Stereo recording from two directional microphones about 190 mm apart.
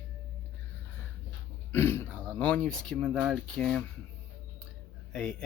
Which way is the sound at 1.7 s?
10° left (ahead or behind).